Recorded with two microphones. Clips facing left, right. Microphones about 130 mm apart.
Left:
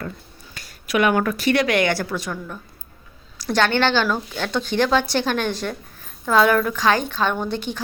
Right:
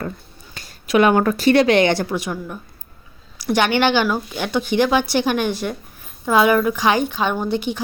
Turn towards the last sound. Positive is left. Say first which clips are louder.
# right 3 dB
turn(degrees=-10)  # may be behind; listen again after turning